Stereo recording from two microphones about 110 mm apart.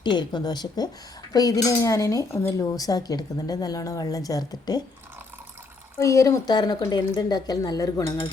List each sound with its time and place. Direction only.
0.0 s speech: 40° left (ahead or behind)
6.0 s speech: 30° left (ahead or behind)